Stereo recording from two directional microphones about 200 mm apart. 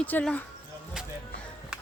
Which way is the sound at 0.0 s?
10° left (ahead or behind).